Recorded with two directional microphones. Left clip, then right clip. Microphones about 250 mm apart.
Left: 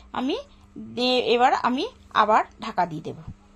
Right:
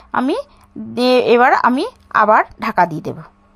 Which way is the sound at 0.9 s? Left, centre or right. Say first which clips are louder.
Right 9 dB; right.